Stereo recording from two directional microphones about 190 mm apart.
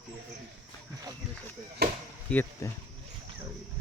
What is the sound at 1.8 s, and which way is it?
Chop, 60° right (ahead or behind).